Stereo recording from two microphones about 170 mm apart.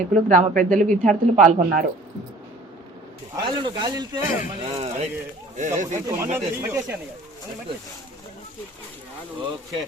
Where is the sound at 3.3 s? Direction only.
25° right (ahead or behind).